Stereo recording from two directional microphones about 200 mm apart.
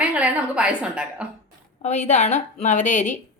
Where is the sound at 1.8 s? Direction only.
35° left (ahead or behind).